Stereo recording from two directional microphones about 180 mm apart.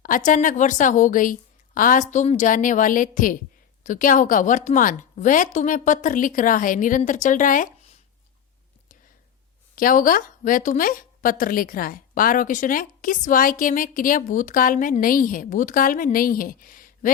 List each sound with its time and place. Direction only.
0.3 s speech: 45° left (ahead or behind)
9.7 s speech: 50° left (ahead or behind)